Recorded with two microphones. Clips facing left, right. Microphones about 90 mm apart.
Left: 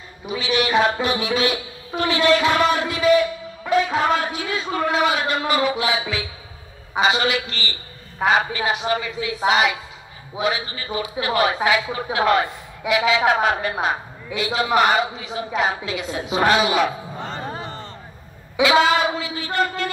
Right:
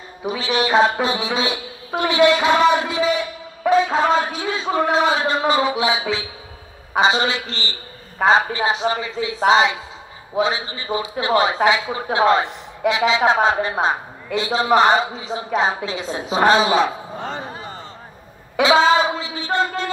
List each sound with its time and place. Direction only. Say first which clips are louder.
0.4 s a woman's voice: right 2 dB; 35° right (ahead or behind)
18.6 s a woman's voice: right 2 dB; 30° right (ahead or behind)